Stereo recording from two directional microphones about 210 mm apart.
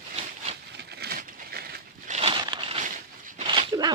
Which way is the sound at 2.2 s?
25° right (ahead or behind).